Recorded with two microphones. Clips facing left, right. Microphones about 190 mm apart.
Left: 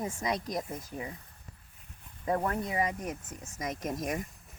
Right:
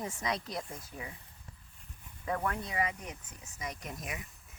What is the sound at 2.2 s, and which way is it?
Speech, 35° left (ahead or behind).